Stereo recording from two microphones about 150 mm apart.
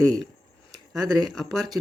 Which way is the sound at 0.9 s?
Centre (ahead or behind).